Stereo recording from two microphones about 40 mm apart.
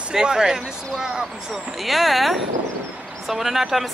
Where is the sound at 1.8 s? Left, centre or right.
Centre.